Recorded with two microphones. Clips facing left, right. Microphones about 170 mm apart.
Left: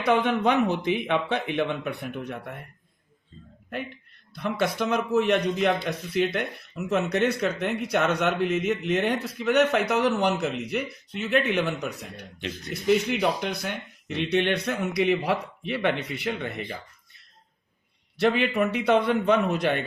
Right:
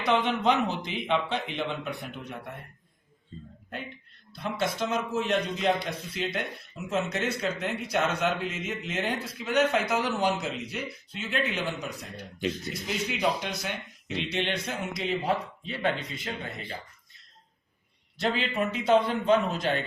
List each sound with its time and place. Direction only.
0.0 s speech: 55° left (ahead or behind)
4.4 s speech: 60° left (ahead or behind)
18.2 s speech: 65° left (ahead or behind)